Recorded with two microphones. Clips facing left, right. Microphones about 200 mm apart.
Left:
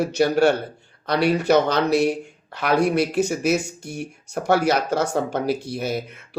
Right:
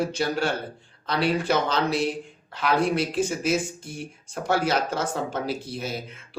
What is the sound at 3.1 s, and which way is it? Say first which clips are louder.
Speech: left 4 dB; 70° left (ahead or behind).